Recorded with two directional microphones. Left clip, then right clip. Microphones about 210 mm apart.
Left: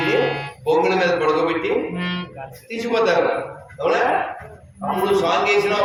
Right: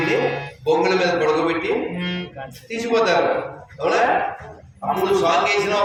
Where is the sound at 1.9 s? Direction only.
40° left (ahead or behind).